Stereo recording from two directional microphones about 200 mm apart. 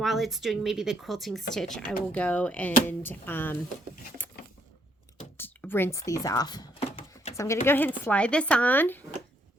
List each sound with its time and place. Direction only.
0.0 s speech: centre (ahead or behind)
5.4 s a sound: 10° left (ahead or behind); by 7.3 s 30° left (ahead or behind)
7.3 s speech: 15° left (ahead or behind)